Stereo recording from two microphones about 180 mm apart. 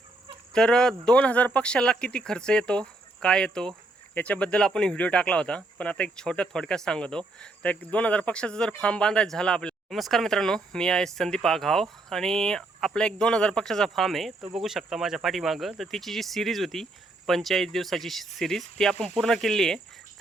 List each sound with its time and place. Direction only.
0.5 s speech: 5° left (ahead or behind)